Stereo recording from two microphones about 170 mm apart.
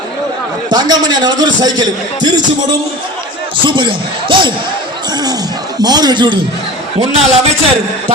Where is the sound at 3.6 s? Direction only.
30° right (ahead or behind).